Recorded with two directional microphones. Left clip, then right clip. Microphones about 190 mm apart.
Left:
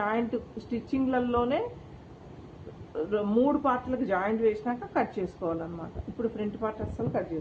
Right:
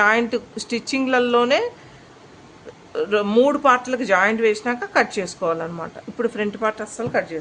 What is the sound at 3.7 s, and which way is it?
Speech, 90° right.